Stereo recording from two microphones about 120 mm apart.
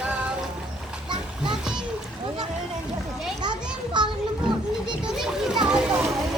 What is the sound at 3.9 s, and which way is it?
Children playing, 40° right (ahead or behind).